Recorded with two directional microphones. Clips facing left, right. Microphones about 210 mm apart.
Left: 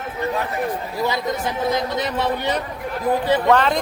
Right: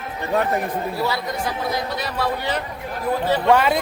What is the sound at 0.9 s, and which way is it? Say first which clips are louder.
A man's voice: left 2 dB; 20° left (ahead or behind).